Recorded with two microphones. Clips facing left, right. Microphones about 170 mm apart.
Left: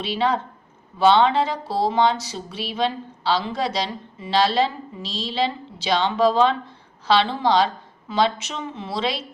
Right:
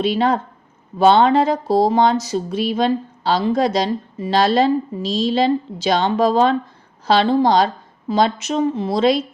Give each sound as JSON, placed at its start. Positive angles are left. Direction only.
{"t": 0.0, "sound": "speech", "side_deg": -45}